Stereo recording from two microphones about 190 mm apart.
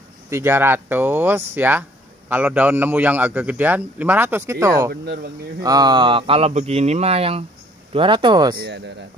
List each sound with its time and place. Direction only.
0.3 s speech: 15° right (ahead or behind)
5.0 s speech: 60° right (ahead or behind)
5.6 s speech: 20° right (ahead or behind)
8.5 s speech: 65° right (ahead or behind)